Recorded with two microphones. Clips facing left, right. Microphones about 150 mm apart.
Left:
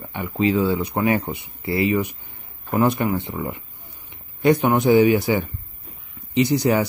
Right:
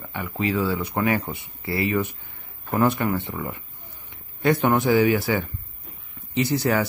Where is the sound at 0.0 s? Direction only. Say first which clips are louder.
Left 5 dB; 20° left (ahead or behind).